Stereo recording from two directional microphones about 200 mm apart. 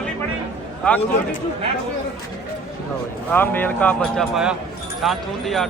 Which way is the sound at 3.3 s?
10° left (ahead or behind).